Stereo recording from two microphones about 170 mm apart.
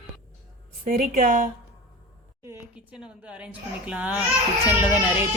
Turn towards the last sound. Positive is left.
turn(degrees=-10)  # may be behind; listen again after turning